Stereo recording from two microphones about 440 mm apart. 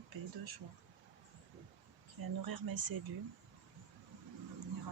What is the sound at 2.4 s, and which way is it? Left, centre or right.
Speech, right.